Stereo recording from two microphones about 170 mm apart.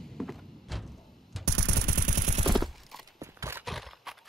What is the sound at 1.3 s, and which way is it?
Music, centre (ahead or behind).